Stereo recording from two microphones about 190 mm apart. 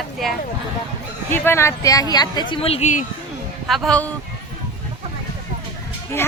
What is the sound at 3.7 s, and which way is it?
Speech, centre (ahead or behind).